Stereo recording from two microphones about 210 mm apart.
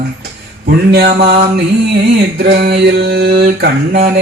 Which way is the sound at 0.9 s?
50° right (ahead or behind).